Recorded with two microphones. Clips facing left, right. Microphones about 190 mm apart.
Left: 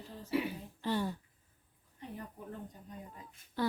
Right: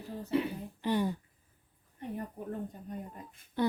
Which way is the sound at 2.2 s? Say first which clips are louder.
Right 7 dB; 55° right (ahead or behind).